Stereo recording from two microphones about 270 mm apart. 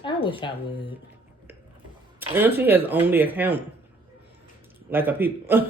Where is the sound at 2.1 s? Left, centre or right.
Centre.